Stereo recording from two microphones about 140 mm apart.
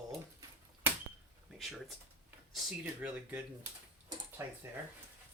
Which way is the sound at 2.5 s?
5° right (ahead or behind).